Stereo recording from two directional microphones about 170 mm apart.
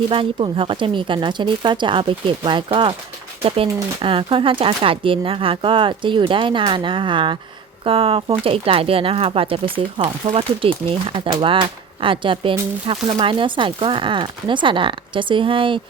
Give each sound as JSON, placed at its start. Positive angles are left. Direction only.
{"t": 0.1, "sound": "speech", "side_deg": -30}